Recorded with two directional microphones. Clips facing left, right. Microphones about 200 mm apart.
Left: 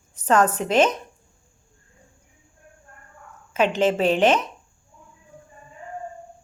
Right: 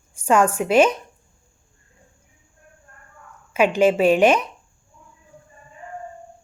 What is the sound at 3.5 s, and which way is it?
Speech, 10° right (ahead or behind).